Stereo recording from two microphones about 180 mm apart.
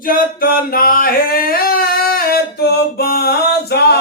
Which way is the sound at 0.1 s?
55° left (ahead or behind).